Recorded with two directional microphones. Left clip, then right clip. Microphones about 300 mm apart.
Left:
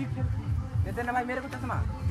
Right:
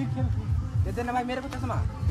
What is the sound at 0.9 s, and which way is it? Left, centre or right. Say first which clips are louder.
Speech: right 1 dB; centre.